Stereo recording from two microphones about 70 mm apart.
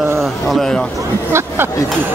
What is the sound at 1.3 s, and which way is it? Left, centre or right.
Speech, right.